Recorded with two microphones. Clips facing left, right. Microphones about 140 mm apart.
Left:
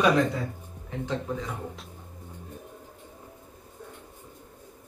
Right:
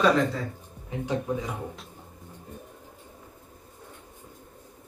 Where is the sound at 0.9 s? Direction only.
15° right (ahead or behind).